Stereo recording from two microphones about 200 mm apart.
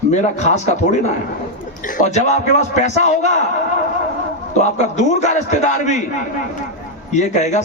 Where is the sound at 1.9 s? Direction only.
35° left (ahead or behind).